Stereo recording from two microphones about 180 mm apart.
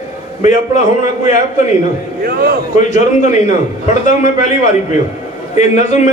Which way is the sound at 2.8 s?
40° left (ahead or behind).